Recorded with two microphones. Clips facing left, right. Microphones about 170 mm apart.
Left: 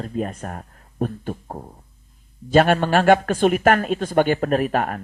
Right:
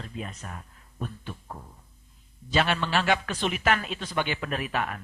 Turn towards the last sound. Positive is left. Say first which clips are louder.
# left 10 dB
turn(degrees=45)  # may be behind; listen again after turning